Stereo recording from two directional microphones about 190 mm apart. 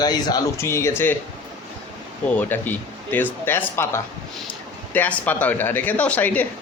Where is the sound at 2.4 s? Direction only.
10° left (ahead or behind).